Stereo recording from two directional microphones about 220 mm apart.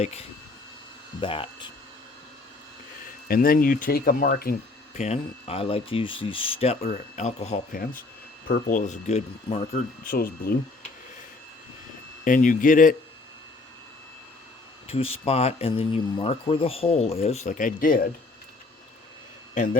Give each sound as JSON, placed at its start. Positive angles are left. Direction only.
{"t": 0.0, "sound": "speech", "side_deg": 30}
{"t": 3.2, "sound": "speech", "side_deg": 40}
{"t": 4.9, "sound": "speech", "side_deg": 30}
{"t": 12.2, "sound": "speech", "side_deg": 35}
{"t": 14.8, "sound": "speech", "side_deg": 25}